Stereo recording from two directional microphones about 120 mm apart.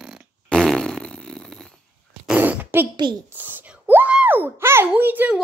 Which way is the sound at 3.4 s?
15° right (ahead or behind).